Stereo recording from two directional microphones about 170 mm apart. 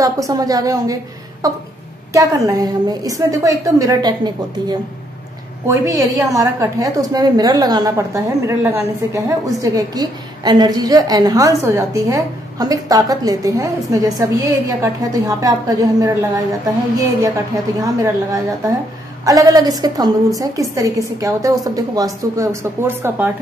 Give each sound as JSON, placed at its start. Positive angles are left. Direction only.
{"t": 0.0, "sound": "a woman's voice", "side_deg": -20}
{"t": 17.7, "sound": "a woman's voice", "side_deg": -20}